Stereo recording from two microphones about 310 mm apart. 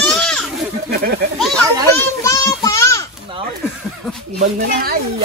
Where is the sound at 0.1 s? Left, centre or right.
Centre.